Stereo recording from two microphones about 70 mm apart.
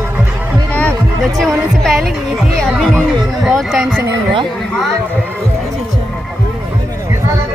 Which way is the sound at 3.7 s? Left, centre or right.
Centre.